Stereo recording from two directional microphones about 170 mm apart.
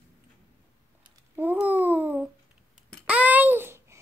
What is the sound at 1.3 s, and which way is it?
Babbling, 10° right (ahead or behind).